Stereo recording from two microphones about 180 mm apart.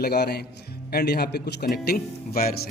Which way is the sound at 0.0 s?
65° left (ahead or behind).